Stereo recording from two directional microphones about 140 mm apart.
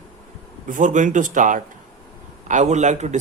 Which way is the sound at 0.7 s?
65° right (ahead or behind).